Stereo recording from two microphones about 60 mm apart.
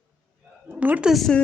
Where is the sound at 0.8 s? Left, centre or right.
Right.